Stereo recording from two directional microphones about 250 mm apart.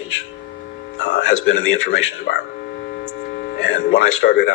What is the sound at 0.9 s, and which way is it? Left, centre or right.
Speech, left.